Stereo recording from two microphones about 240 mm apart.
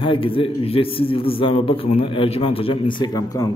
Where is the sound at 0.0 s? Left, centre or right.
Left.